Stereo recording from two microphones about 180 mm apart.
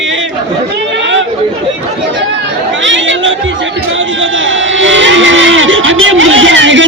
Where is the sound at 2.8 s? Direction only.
90° right.